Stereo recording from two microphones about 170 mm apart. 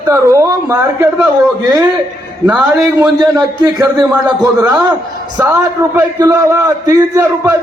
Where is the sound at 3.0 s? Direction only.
25° right (ahead or behind).